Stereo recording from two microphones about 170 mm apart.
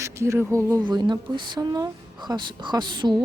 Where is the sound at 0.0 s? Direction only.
15° right (ahead or behind).